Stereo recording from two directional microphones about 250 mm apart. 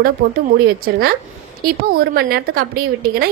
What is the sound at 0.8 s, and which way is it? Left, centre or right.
A woman's voice, right.